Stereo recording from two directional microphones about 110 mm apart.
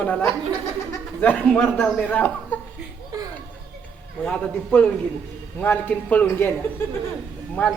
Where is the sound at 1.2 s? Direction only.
15° left (ahead or behind).